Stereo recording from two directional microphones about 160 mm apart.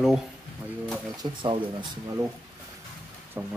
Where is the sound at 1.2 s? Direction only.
30° right (ahead or behind).